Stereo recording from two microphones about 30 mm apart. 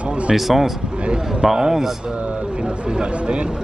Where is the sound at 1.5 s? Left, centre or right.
Centre.